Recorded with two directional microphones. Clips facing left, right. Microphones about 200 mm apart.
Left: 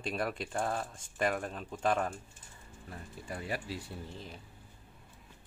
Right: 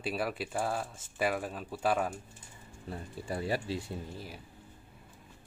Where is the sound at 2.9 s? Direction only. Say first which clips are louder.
Right 5 dB; 30° right (ahead or behind).